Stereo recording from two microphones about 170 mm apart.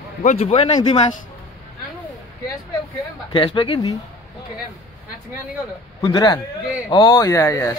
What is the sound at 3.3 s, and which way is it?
Speech, 30° left (ahead or behind).